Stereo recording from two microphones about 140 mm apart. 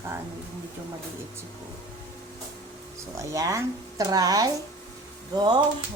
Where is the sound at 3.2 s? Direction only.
25° right (ahead or behind).